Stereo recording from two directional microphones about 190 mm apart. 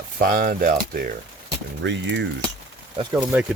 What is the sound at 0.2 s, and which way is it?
Speech, 50° right (ahead or behind).